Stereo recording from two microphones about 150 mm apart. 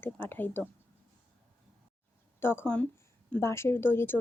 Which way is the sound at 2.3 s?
15° left (ahead or behind).